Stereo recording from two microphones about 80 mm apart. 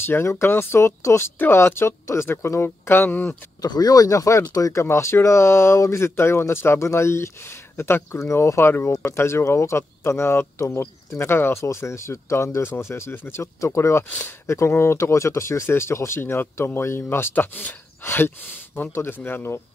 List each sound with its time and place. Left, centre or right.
0.0 s speech: left
3.6 s speech: left
4.8 s speech: left
14.0 s speech: left
14.4 s speech: left